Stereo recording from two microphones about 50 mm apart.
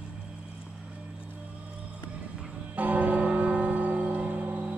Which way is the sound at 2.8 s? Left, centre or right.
Right.